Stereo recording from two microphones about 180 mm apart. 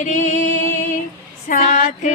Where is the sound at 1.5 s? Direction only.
45° left (ahead or behind).